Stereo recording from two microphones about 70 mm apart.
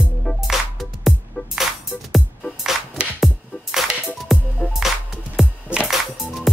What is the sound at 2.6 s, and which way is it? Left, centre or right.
Music, centre.